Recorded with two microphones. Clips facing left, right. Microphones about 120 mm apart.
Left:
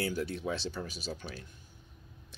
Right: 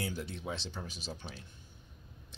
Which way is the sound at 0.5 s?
15° right (ahead or behind).